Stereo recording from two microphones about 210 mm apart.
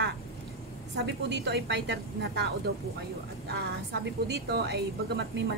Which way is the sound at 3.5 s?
55° right (ahead or behind).